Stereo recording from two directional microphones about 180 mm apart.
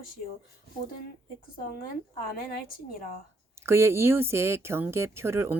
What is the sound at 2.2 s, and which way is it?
Speech, 55° left (ahead or behind).